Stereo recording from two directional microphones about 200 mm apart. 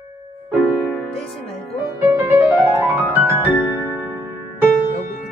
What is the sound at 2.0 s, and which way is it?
Music, 15° right (ahead or behind).